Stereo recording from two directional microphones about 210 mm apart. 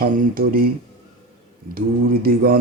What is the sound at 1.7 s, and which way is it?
Mantra, 45° right (ahead or behind).